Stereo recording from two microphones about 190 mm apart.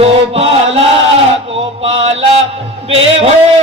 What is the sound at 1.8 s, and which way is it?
Mantra, 30° right (ahead or behind).